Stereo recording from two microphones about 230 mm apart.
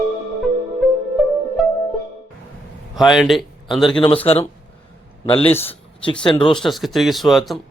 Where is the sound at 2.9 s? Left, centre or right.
Centre.